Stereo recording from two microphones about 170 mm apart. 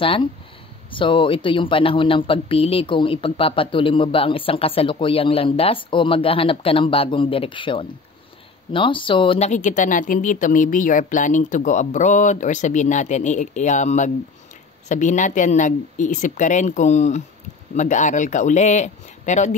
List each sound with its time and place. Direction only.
0.0 s speech: 35° left (ahead or behind)
9.5 s speech: 45° left (ahead or behind)